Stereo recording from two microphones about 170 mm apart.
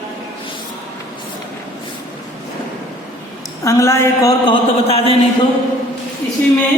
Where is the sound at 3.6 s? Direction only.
15° left (ahead or behind); by 5.2 s 35° left (ahead or behind).